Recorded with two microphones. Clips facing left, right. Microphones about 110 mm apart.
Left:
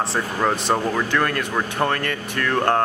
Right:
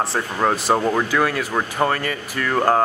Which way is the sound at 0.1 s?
5° right (ahead or behind).